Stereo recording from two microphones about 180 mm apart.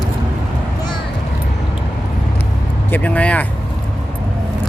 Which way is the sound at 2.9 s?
10° left (ahead or behind).